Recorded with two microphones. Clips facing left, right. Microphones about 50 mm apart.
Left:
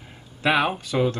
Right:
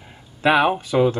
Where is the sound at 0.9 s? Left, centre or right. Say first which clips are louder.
Right 4 dB; centre.